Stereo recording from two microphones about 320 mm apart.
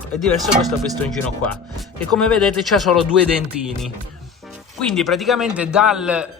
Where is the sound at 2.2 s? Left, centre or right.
Centre.